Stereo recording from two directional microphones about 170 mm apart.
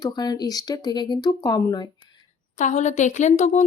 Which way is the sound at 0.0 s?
25° left (ahead or behind).